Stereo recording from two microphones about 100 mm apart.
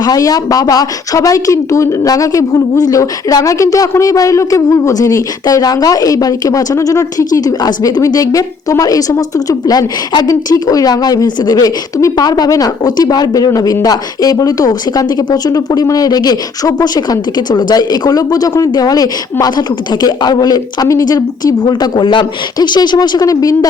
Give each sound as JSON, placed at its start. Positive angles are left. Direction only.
{"t": 0.0, "sound": "speech", "side_deg": 40}